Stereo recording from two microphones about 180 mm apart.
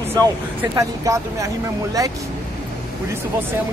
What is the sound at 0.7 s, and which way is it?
Speech, 20° right (ahead or behind).